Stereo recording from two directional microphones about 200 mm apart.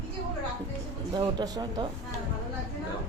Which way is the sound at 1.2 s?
20° right (ahead or behind).